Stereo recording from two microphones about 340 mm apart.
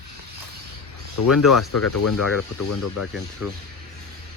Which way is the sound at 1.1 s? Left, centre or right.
Left.